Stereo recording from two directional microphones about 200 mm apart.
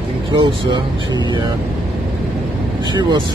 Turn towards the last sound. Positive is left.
turn(degrees=-20)  # may be behind; listen again after turning